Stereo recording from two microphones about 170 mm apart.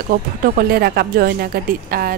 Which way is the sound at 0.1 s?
65° right (ahead or behind).